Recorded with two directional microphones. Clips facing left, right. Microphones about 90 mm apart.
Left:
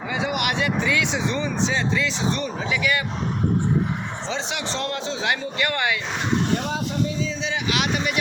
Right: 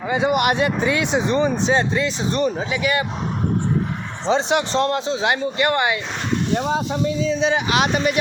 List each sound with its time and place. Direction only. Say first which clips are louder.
0.1 s speech: right 7 dB; 40° right (ahead or behind)
2.6 s speech: right 2 dB; 30° right (ahead or behind)
4.3 s speech: right 11 dB; 45° right (ahead or behind); by 6.0 s 25° right (ahead or behind)
6.9 s speech: right 5 dB; 45° right (ahead or behind)